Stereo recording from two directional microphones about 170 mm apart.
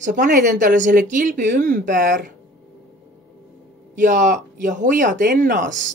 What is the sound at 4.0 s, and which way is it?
Speech, 50° right (ahead or behind).